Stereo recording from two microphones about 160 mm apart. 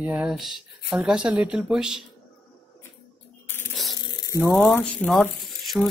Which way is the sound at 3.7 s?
Centre (ahead or behind).